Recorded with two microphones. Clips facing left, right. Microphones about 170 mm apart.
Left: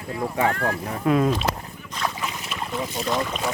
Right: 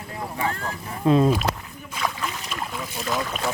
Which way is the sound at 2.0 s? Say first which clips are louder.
Even; centre (ahead or behind).